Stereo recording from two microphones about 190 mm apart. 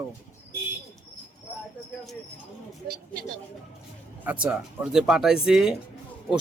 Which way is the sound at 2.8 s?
50° right (ahead or behind).